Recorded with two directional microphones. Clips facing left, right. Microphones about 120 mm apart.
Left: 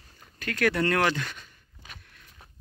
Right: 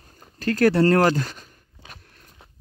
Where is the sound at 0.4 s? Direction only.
35° right (ahead or behind).